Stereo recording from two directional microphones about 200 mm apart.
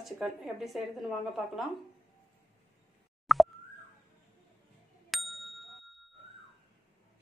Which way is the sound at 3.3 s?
Centre (ahead or behind).